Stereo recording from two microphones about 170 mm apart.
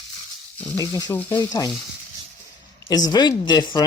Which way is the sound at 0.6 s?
20° left (ahead or behind).